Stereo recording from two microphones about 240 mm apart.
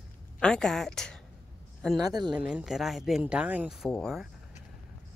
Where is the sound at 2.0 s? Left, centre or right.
Centre.